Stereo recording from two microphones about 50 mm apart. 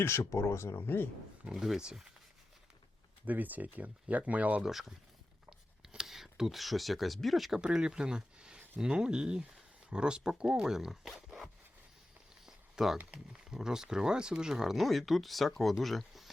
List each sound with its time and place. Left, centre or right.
0.3 s speech: left
1.5 s speech: centre
3.2 s speech: right
4.6 s speech: centre
5.5 s a sound: centre
7.6 s speech: centre
12.5 s a sound: centre
13.4 s speech: centre